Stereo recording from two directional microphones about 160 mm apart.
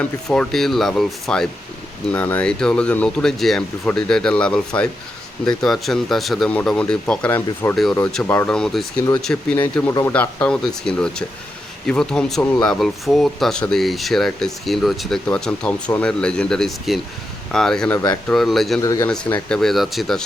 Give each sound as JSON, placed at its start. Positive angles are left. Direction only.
{"t": 0.0, "sound": "speech", "side_deg": 5}
{"t": 17.9, "sound": "speech", "side_deg": 25}
{"t": 18.3, "sound": "speech", "side_deg": 0}
{"t": 18.8, "sound": "speech", "side_deg": 20}
{"t": 19.0, "sound": "speech", "side_deg": 5}